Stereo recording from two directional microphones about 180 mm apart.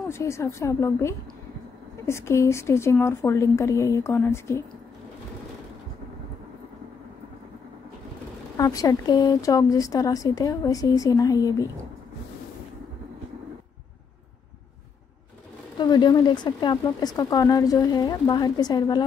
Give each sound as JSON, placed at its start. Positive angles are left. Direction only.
{"t": 0.1, "sound": "a woman's voice", "side_deg": 15}
{"t": 8.5, "sound": "speech", "side_deg": 20}
{"t": 15.8, "sound": "speech", "side_deg": 25}